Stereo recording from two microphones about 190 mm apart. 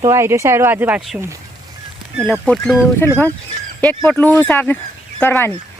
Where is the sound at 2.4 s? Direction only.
5° left (ahead or behind).